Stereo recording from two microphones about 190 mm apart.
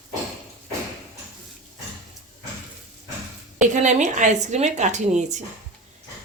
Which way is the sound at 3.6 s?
40° right (ahead or behind).